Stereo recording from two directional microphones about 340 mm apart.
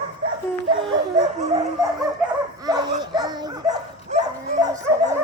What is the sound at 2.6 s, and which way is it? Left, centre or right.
Dog, centre.